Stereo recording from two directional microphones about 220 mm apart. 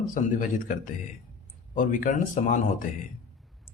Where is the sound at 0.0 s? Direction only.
35° left (ahead or behind).